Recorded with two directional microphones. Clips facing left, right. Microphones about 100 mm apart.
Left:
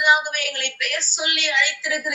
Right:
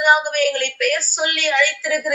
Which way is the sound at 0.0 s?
45° right (ahead or behind).